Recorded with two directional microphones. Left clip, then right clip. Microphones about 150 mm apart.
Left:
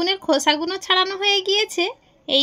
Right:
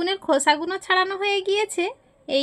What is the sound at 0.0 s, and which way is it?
A woman's voice, 15° left (ahead or behind).